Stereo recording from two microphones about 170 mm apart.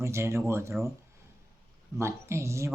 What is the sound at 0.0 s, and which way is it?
Speech, 15° right (ahead or behind).